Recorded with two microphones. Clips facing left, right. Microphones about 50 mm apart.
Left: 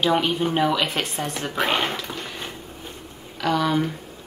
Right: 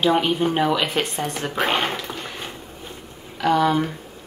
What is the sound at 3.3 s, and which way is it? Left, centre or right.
Speech, centre.